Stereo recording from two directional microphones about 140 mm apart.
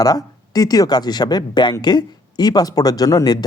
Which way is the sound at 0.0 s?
25° left (ahead or behind).